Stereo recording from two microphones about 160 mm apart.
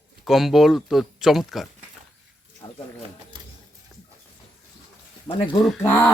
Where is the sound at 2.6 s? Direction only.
20° left (ahead or behind).